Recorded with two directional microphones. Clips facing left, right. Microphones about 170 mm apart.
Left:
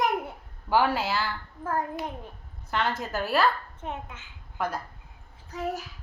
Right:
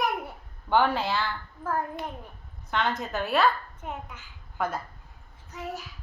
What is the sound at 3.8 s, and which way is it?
Speech, 25° left (ahead or behind).